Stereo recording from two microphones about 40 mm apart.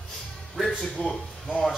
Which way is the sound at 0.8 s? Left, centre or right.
Left.